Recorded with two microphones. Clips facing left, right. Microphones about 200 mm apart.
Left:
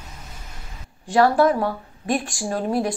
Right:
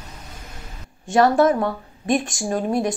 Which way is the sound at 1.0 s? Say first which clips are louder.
Right 1 dB; 20° right (ahead or behind).